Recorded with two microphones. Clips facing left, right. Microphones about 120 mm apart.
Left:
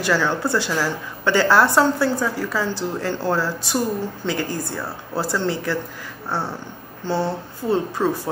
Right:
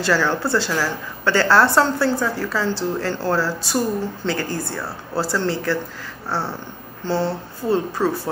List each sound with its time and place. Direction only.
0.0 s a woman's voice: 15° left (ahead or behind)